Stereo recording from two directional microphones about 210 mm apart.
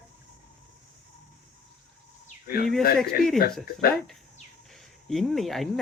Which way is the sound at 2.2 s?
45° left (ahead or behind).